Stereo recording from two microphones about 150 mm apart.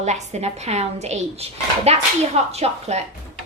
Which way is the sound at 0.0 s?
50° right (ahead or behind).